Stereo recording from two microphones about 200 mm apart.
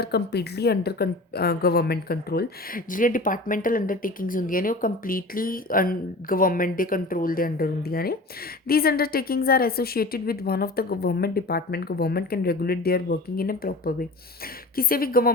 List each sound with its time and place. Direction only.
0.0 s a woman's voice: 55° left (ahead or behind)